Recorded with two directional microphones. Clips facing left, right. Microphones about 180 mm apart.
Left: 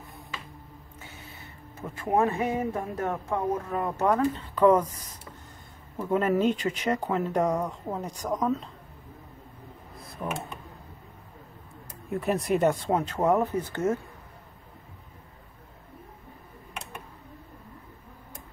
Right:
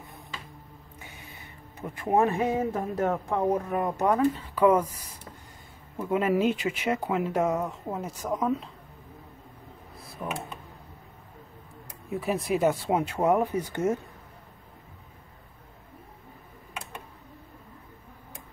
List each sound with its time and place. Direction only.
1.8 s speech: 15° right (ahead or behind)
9.9 s a sound: centre (ahead or behind)
12.1 s speech: centre (ahead or behind)